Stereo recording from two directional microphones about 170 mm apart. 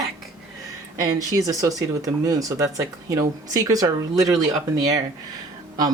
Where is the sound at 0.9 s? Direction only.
20° right (ahead or behind).